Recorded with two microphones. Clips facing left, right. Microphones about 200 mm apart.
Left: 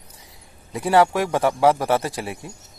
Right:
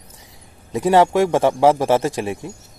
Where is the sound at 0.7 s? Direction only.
20° right (ahead or behind).